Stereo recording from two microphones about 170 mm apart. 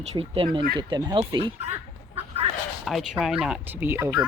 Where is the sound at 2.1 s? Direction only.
35° right (ahead or behind).